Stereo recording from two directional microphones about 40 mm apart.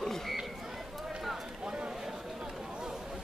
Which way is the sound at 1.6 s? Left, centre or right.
Right.